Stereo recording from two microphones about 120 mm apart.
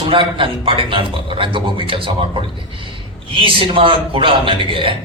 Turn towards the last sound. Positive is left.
turn(degrees=-45)  # may be behind; listen again after turning